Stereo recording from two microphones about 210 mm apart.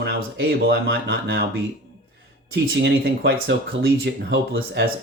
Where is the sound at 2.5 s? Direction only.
50° right (ahead or behind).